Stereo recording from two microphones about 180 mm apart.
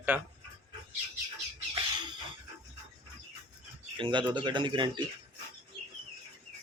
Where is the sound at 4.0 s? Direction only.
25° right (ahead or behind).